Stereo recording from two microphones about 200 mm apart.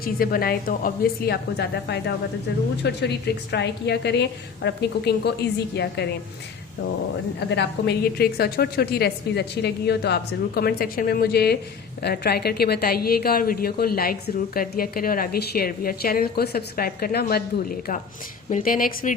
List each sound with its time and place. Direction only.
0.0 s a woman's voice: 45° left (ahead or behind)
7.3 s a woman's voice: 60° left (ahead or behind)